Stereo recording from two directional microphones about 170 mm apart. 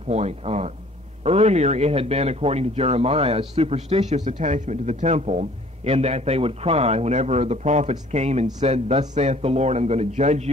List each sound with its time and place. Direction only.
0.1 s speech: 40° right (ahead or behind)